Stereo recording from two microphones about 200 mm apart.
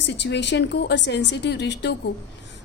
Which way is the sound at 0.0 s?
60° left (ahead or behind).